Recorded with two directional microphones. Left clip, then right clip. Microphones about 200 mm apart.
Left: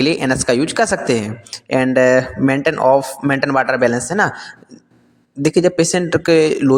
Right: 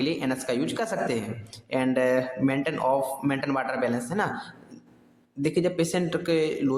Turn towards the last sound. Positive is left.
turn(degrees=40)  # may be behind; listen again after turning